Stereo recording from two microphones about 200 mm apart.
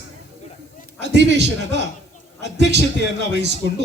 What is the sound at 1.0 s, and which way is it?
A man's voice, 60° right (ahead or behind).